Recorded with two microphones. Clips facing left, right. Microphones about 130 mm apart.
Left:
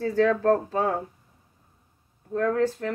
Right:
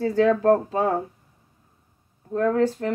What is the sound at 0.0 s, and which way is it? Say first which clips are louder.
Speech: right 3 dB; 15° right (ahead or behind).